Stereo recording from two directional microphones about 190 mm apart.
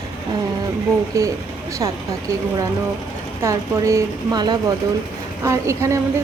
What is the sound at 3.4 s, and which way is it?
A woman's voice, 15° right (ahead or behind).